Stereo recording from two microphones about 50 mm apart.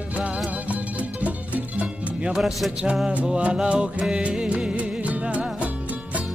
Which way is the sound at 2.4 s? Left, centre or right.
Centre.